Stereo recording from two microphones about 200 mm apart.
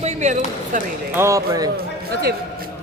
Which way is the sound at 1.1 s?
15° right (ahead or behind).